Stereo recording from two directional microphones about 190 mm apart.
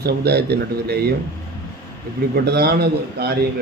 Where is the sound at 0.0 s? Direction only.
55° right (ahead or behind).